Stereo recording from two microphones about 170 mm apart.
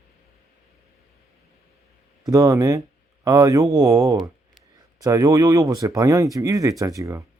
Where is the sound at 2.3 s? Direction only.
20° right (ahead or behind).